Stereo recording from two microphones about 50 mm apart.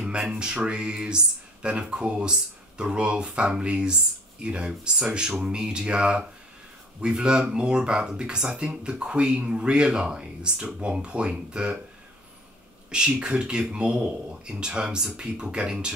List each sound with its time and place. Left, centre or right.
0.4 s speech: centre
12.9 s speech: centre